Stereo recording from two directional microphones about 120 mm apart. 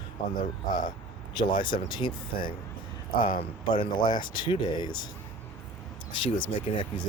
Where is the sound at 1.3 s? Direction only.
40° left (ahead or behind).